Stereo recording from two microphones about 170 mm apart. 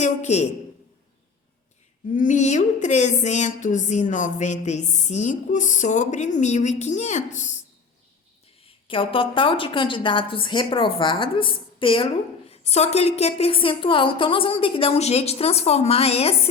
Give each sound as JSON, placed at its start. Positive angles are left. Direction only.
{"t": 0.0, "sound": "speech", "side_deg": 45}
{"t": 2.1, "sound": "speech", "side_deg": 45}
{"t": 8.6, "sound": "a woman's voice", "side_deg": 30}